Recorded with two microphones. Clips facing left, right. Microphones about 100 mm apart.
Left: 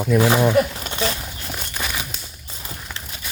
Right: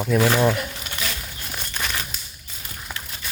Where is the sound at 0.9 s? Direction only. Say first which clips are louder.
Left 7 dB; 30° left (ahead or behind).